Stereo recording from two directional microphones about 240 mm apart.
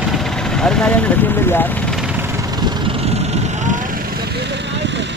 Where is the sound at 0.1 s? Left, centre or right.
Centre.